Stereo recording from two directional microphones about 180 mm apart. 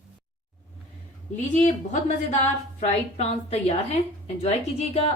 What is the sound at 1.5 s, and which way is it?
A woman's voice, 40° left (ahead or behind).